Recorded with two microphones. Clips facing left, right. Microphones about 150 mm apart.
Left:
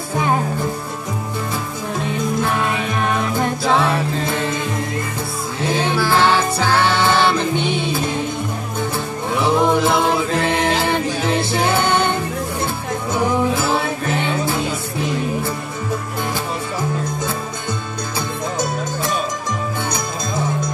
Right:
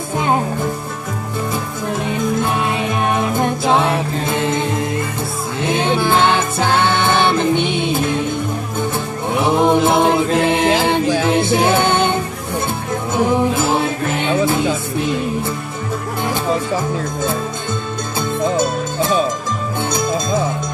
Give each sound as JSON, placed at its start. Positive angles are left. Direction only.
{"t": 3.1, "sound": "music", "side_deg": -20}
{"t": 9.3, "sound": "music", "side_deg": -20}
{"t": 13.6, "sound": "music", "side_deg": -20}